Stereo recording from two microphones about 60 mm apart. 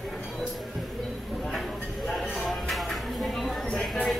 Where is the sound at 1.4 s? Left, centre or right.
Centre.